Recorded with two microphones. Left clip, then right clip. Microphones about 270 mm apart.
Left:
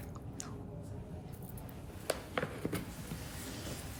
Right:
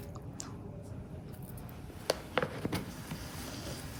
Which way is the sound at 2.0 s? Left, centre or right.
Right.